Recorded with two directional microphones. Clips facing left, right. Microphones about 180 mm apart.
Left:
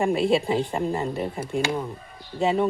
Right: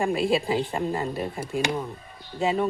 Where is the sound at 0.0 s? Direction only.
Centre (ahead or behind).